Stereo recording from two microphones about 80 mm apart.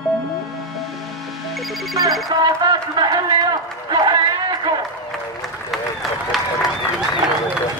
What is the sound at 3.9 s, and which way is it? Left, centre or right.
Music, right.